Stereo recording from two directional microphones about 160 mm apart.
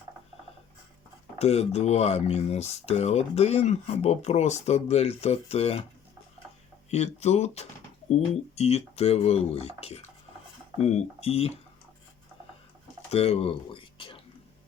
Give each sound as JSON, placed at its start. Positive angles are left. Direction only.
{"t": 1.4, "sound": "speech", "side_deg": 40}
{"t": 6.9, "sound": "speech", "side_deg": 45}
{"t": 13.1, "sound": "a sound", "side_deg": 40}